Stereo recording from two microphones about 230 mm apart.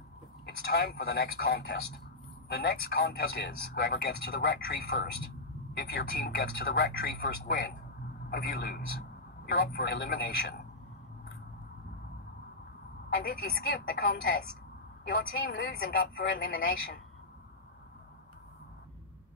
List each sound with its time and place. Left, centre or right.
0.7 s a man's voice: left
13.1 s a man's voice: left